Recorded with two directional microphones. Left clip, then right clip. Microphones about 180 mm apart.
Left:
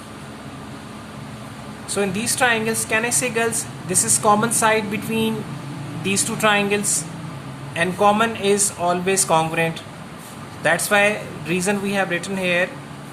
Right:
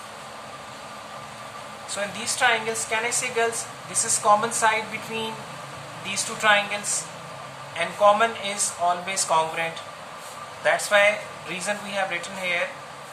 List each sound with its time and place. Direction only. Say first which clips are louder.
1.9 s a woman's voice: left 6 dB; 50° left (ahead or behind)
7.8 s speech: left 2 dB; 50° left (ahead or behind)